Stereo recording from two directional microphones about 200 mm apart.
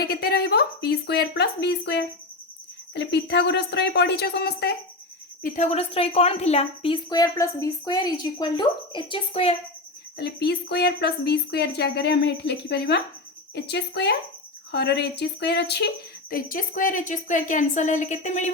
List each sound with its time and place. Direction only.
0.0 s speech: 50° left (ahead or behind)
5.4 s speech: 45° left (ahead or behind)
5.7 s a woman's voice: 30° left (ahead or behind)
10.2 s speech: 55° left (ahead or behind)
16.3 s a woman's voice: 45° left (ahead or behind)